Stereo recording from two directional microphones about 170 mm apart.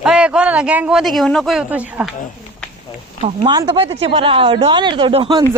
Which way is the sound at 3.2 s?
30° right (ahead or behind).